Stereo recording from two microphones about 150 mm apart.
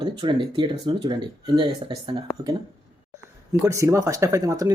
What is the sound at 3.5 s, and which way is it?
Speech, 20° right (ahead or behind).